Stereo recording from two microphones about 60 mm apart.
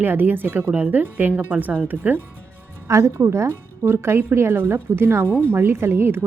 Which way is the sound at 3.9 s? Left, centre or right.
Right.